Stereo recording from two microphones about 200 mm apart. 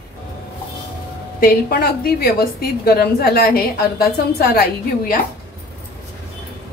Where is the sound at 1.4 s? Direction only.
50° left (ahead or behind).